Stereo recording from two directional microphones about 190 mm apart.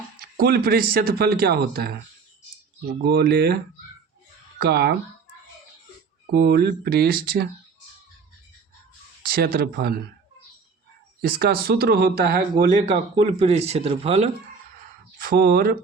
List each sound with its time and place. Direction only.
0.2 s speech: 55° right (ahead or behind)
3.0 s speech: 60° right (ahead or behind)
6.3 s speech: 60° right (ahead or behind)
9.2 s speech: 50° right (ahead or behind)
11.2 s speech: 55° right (ahead or behind); by 14.3 s 35° right (ahead or behind)
15.2 s speech: 50° right (ahead or behind)